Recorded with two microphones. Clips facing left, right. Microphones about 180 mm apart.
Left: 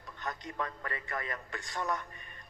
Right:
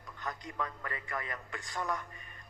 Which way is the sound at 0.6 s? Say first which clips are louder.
Left 1 dB; 40° left (ahead or behind).